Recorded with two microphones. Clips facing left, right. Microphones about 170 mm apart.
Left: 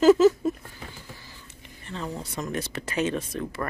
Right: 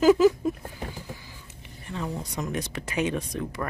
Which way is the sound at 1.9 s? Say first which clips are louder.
Right 1 dB; 5° right (ahead or behind).